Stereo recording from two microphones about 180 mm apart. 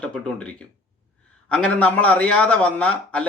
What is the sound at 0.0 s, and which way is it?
Speech, 5° left (ahead or behind).